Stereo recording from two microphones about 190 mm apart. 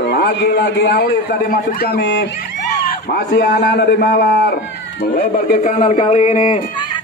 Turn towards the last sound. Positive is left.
turn(degrees=40)  # may be behind; listen again after turning